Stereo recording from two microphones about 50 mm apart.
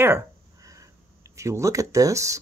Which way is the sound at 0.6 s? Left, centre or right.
Right.